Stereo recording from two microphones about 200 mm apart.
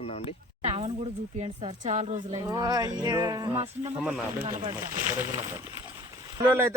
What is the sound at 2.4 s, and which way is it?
Music, 15° right (ahead or behind).